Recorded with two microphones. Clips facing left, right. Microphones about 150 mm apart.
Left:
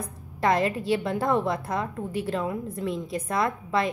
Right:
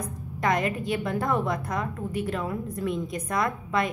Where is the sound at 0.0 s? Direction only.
30° left (ahead or behind).